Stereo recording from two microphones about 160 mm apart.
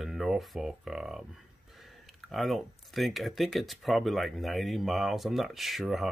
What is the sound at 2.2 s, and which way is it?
Speech, centre (ahead or behind).